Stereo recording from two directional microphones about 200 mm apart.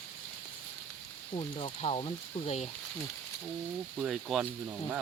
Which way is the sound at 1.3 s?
30° left (ahead or behind).